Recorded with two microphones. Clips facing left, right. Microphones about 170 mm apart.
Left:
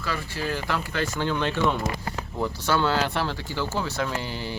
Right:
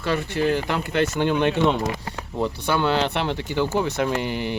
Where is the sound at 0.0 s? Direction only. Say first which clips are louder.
Right 8 dB; 25° right (ahead or behind).